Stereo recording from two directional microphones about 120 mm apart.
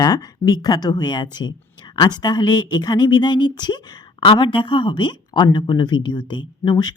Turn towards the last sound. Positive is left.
turn(degrees=35)  # may be behind; listen again after turning